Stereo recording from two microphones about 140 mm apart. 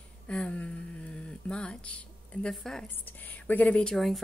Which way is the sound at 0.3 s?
10° left (ahead or behind).